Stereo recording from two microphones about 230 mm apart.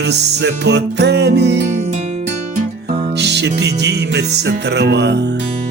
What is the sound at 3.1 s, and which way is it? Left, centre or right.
Music, right.